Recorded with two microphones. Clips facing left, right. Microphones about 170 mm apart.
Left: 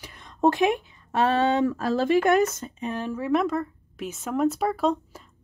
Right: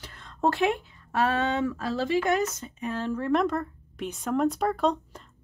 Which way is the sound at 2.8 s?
20° left (ahead or behind).